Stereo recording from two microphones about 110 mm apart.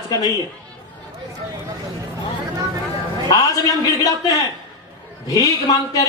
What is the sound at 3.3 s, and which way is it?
Speech, 35° left (ahead or behind).